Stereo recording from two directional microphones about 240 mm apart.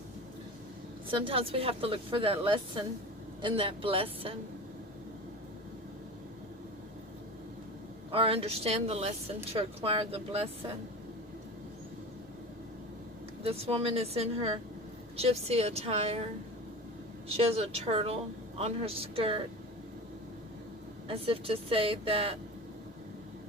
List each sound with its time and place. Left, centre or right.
1.0 s a woman's voice: right
8.1 s a woman's voice: right
13.4 s a woman's voice: right
21.1 s a woman's voice: right